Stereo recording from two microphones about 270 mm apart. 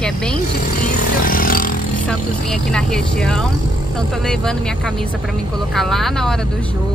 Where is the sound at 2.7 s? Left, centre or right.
Centre.